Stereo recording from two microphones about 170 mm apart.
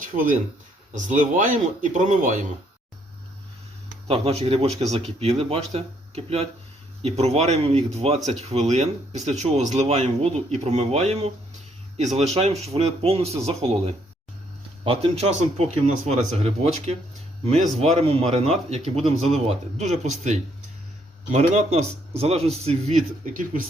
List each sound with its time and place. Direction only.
0.0 s a man's voice: 50° right (ahead or behind)
4.1 s speech: 35° right (ahead or behind); by 23.6 s 50° right (ahead or behind)